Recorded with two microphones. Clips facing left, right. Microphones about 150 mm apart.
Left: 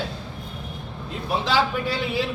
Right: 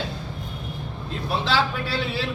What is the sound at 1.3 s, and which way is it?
Speech, 15° left (ahead or behind).